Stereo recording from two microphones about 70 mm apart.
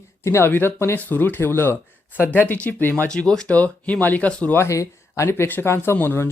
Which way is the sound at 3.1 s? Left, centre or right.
Centre.